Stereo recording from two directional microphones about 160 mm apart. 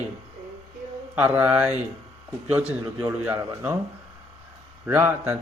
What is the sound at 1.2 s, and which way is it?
Speech, 15° right (ahead or behind).